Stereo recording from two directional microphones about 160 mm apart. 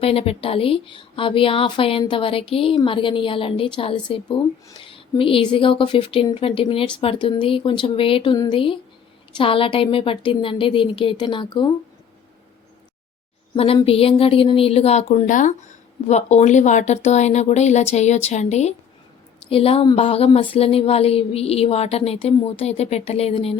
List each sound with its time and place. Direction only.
0.0 s a woman's voice: 35° left (ahead or behind)
13.7 s a woman's voice: 35° left (ahead or behind)